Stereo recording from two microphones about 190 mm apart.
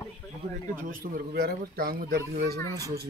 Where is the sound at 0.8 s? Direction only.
50° right (ahead or behind).